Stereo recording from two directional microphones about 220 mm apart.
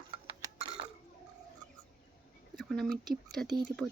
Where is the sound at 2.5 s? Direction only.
5° left (ahead or behind).